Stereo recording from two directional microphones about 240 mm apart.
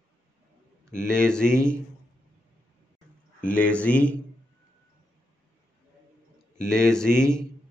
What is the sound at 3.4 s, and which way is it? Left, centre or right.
Speech, centre.